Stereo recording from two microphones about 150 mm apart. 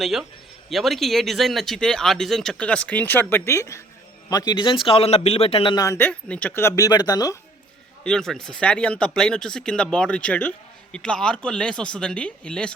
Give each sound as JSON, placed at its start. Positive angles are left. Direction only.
{"t": 0.0, "sound": "speech", "side_deg": 0}
{"t": 5.7, "sound": "speech", "side_deg": 20}
{"t": 8.0, "sound": "speech", "side_deg": 5}